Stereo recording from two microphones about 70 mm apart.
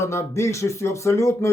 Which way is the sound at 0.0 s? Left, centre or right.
Left.